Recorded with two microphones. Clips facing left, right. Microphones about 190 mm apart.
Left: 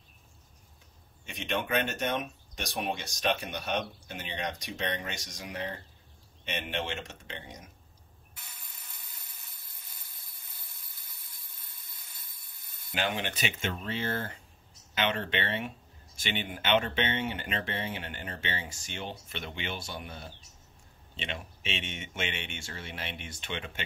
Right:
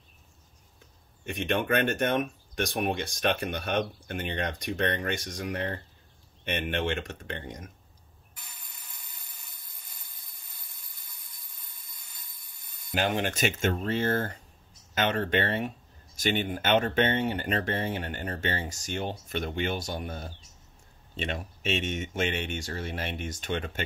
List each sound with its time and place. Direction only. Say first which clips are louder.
1.2 s speech: right 5 dB; 55° right (ahead or behind)
12.9 s speech: right 5 dB; 45° right (ahead or behind)